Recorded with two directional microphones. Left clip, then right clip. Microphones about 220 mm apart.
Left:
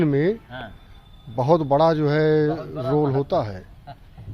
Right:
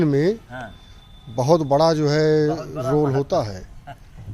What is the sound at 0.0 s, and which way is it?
A man's voice, 5° right (ahead or behind).